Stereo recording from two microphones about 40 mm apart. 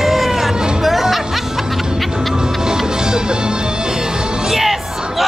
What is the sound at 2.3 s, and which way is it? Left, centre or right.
Music, centre.